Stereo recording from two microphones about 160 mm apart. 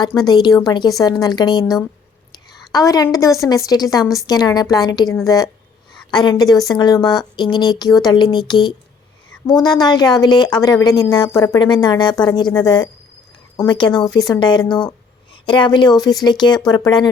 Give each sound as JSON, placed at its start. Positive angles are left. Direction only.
{"t": 0.1, "sound": "speech", "side_deg": 25}
{"t": 2.3, "sound": "a sound", "side_deg": 25}
{"t": 3.5, "sound": "speech", "side_deg": 25}